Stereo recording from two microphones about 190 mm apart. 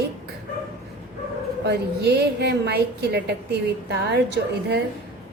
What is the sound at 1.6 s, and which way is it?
A woman's voice, 60° right (ahead or behind).